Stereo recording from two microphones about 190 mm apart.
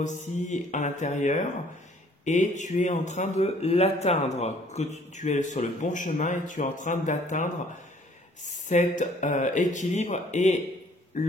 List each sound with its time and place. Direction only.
0.0 s a man's voice: 40° left (ahead or behind)
8.6 s a man's voice: 40° left (ahead or behind)